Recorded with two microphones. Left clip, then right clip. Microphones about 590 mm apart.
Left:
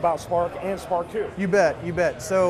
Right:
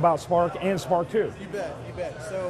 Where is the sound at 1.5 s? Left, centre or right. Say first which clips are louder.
Left 12 dB; left.